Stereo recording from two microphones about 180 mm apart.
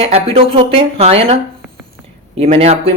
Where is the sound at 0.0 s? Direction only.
35° right (ahead or behind).